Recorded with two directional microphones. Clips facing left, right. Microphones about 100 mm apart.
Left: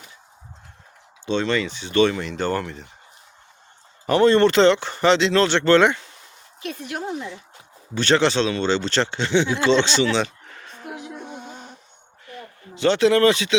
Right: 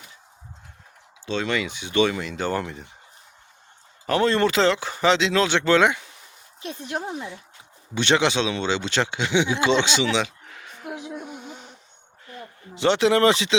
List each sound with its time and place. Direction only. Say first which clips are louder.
1.2 s speech: left 3 dB; 5° right (ahead or behind)
4.0 s speech: left 5 dB; centre (ahead or behind)
6.6 s speech: left 1 dB; 25° right (ahead or behind); by 11.0 s 10° right (ahead or behind)
11.3 s a sound: left 1 dB; 20° left (ahead or behind)
12.3 s speech: left 1 dB; 20° right (ahead or behind)